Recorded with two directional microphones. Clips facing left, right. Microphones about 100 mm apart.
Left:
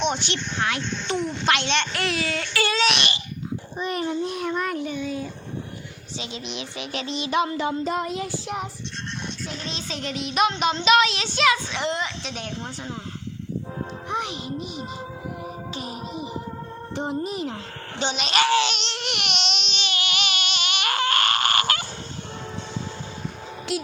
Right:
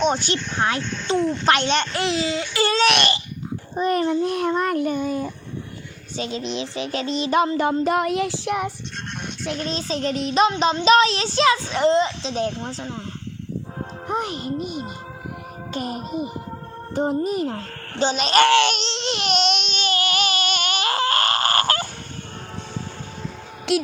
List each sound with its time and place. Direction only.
0.0 s a child's voice: 40° right (ahead or behind); by 2.4 s 25° right (ahead or behind)
2.8 s a child's voice: 55° right (ahead or behind)
3.8 s speech: 45° right (ahead or behind); by 9.6 s 65° right (ahead or behind)
9.6 s a child's voice: 40° right (ahead or behind); by 12.9 s 25° right (ahead or behind)
14.1 s speech: 45° right (ahead or behind)
18.4 s laughter: 65° right (ahead or behind)
18.9 s baby cry: 30° right (ahead or behind)
23.7 s laughter: 70° right (ahead or behind)